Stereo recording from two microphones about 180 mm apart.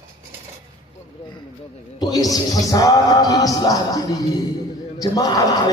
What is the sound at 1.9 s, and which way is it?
A man's voice, 20° left (ahead or behind).